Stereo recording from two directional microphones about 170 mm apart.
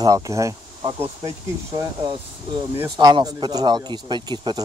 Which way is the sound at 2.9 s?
25° right (ahead or behind).